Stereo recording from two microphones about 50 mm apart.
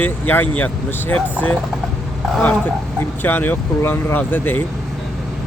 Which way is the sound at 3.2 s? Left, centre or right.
Left.